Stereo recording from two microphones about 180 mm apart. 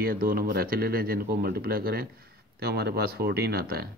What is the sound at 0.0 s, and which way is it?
Speech, 55° right (ahead or behind).